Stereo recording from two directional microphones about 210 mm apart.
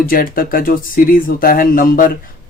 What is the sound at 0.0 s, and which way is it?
Speech, 45° left (ahead or behind).